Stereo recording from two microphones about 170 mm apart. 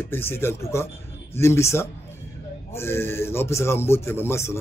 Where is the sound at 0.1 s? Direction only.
15° left (ahead or behind).